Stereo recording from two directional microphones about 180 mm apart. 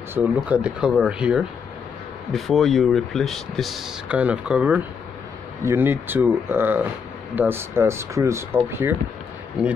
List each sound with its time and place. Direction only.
0.1 s speech: 10° right (ahead or behind)